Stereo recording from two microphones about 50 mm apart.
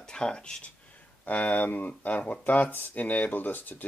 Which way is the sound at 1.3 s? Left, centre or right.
Left.